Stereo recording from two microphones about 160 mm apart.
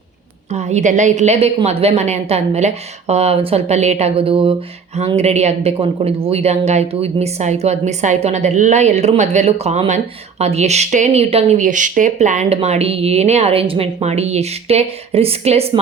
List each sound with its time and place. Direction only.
0.5 s speech: 45° right (ahead or behind)